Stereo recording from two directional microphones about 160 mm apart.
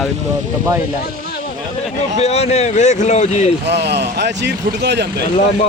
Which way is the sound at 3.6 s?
90° right.